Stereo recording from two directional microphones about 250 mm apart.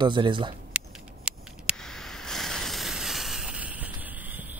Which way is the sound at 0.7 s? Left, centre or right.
Centre.